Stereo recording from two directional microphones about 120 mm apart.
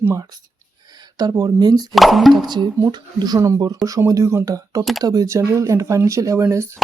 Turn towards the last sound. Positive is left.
turn(degrees=-25)  # may be behind; listen again after turning